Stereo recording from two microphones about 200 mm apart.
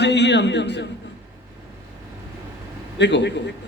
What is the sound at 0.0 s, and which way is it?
Speech, 60° left (ahead or behind).